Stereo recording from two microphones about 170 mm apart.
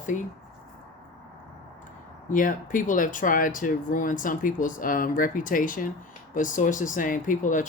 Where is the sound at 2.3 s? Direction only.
50° left (ahead or behind).